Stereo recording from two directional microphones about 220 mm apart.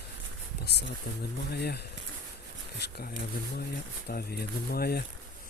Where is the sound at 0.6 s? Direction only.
50° left (ahead or behind).